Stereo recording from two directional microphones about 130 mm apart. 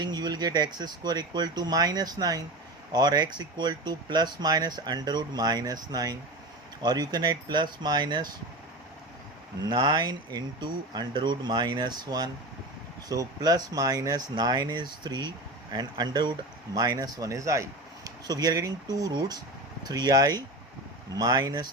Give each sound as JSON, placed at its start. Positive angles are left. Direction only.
{"t": 0.0, "sound": "speech", "side_deg": -35}
{"t": 9.6, "sound": "speech", "side_deg": -30}